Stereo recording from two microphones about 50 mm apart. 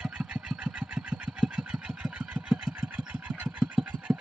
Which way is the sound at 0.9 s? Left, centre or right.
Right.